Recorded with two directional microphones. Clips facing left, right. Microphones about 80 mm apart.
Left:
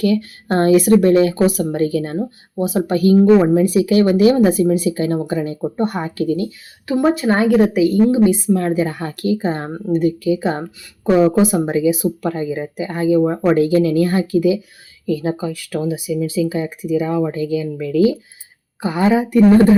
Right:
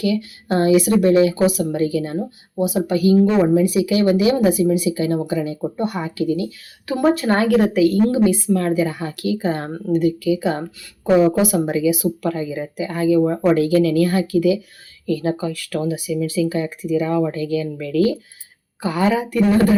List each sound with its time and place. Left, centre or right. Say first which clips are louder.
0.0 s speech: left 4 dB; left
6.9 s a woman's voice: left 1 dB; centre; by 8.9 s left
8.9 s a woman's voice: left 3 dB; left